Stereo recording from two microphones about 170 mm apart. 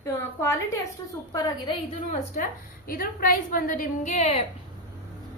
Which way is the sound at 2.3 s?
50° left (ahead or behind).